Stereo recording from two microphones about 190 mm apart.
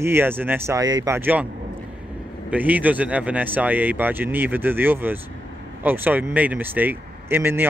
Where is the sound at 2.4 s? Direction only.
10° right (ahead or behind).